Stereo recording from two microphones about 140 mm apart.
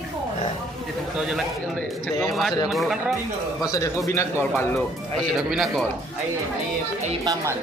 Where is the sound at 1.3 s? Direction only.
Centre (ahead or behind).